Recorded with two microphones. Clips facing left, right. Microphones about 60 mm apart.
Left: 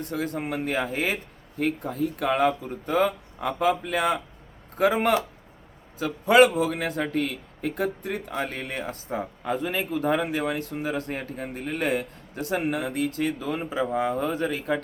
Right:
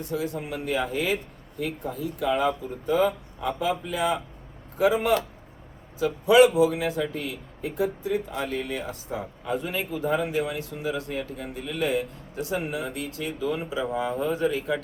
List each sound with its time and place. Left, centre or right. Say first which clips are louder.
0.0 s a man's voice: even; left